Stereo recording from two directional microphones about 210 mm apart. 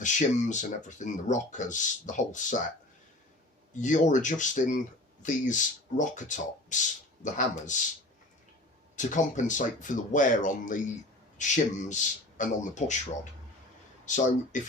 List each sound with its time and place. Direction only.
0.0 s speech: 35° left (ahead or behind)
3.8 s speech: 35° left (ahead or behind)
9.0 s speech: 35° left (ahead or behind)
14.5 s speech: 35° left (ahead or behind)